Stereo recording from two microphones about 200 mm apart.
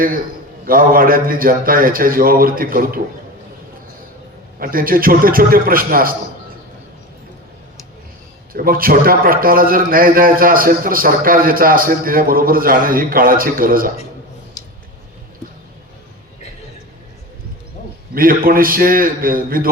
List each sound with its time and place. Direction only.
0.6 s a man's voice: 45° right (ahead or behind)
4.6 s a man's voice: 45° right (ahead or behind)
8.5 s a man's voice: 45° right (ahead or behind)
14.6 s a sound: 20° left (ahead or behind)
18.1 s a man's voice: 45° right (ahead or behind)